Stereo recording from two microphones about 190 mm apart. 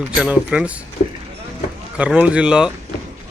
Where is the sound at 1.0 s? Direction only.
40° left (ahead or behind).